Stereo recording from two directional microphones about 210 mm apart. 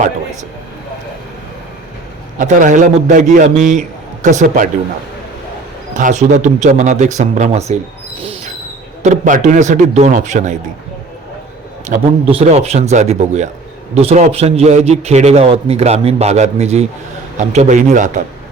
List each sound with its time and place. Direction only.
2.4 s a man's voice: 40° right (ahead or behind)
5.9 s a man's voice: 35° right (ahead or behind)
9.0 s a man's voice: 35° right (ahead or behind)
11.9 s a man's voice: 30° right (ahead or behind)